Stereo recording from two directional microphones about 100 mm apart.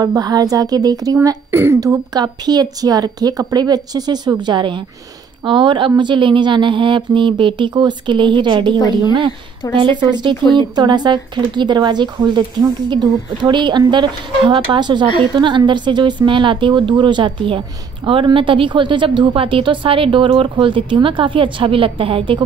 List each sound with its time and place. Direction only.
0.0 s speech: 40° right (ahead or behind)
1.5 s speech: 25° right (ahead or behind)
2.1 s a woman's voice: 45° right (ahead or behind)
9.8 s a woman's voice: 50° right (ahead or behind)